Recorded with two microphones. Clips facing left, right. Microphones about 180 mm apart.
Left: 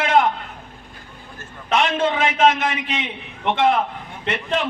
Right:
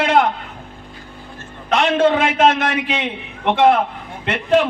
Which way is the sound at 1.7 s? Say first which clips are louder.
Right 5 dB; 60° right (ahead or behind).